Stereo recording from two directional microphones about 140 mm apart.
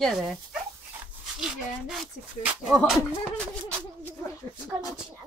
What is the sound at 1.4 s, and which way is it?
Speech, 5° right (ahead or behind).